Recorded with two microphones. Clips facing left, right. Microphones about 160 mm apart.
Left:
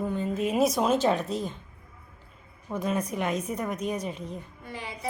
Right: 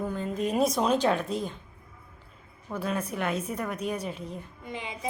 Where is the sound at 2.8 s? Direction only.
5° right (ahead or behind).